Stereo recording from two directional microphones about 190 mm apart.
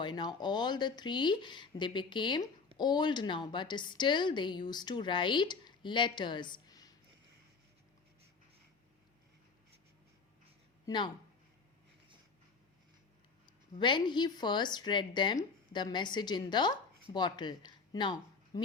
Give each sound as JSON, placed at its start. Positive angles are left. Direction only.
{"t": 0.0, "sound": "a woman's voice", "side_deg": 25}
{"t": 10.8, "sound": "speech", "side_deg": 25}
{"t": 13.7, "sound": "a woman's voice", "side_deg": 25}